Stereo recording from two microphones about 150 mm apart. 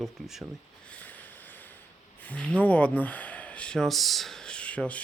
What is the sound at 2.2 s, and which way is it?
Speech, 10° left (ahead or behind).